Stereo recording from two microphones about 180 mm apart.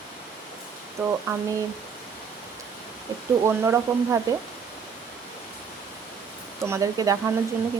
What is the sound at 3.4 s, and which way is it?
Speech, 15° right (ahead or behind).